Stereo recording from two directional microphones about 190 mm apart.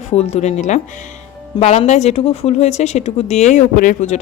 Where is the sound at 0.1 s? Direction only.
35° left (ahead or behind).